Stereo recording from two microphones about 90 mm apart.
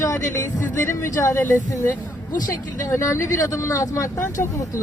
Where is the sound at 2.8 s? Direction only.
35° left (ahead or behind).